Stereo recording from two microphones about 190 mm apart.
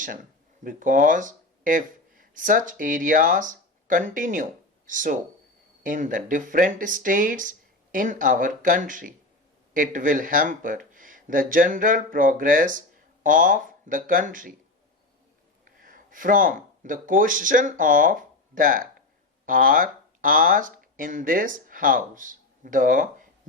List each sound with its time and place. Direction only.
0.6 s speech: 45° right (ahead or behind)
15.8 s speech: 45° right (ahead or behind)